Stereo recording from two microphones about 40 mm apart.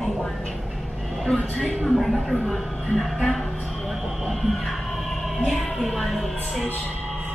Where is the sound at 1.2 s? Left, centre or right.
Centre.